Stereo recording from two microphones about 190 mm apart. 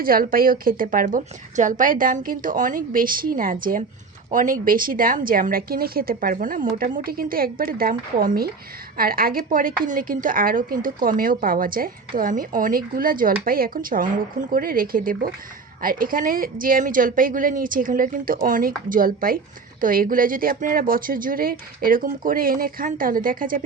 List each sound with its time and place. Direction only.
0.0 s a woman's voice: 50° right (ahead or behind)